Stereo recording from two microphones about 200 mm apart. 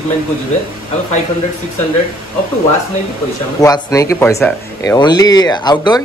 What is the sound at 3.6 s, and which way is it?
Speech, 20° left (ahead or behind).